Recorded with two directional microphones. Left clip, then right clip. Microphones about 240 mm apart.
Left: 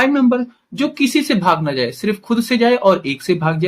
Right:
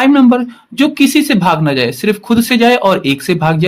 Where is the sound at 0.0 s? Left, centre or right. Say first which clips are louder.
Right 5 dB; right.